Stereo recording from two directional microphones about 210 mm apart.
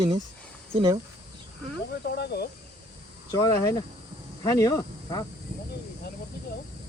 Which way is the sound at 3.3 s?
15° left (ahead or behind).